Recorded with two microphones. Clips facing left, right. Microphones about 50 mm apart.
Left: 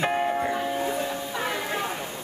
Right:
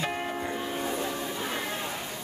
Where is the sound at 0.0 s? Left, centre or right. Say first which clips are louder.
Left 7 dB; left.